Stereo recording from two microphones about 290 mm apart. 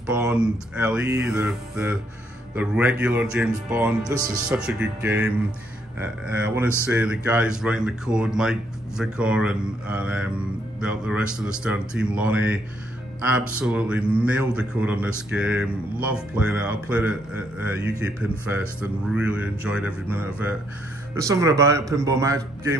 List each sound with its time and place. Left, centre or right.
0.1 s a man's voice: centre
13.6 s a man's voice: centre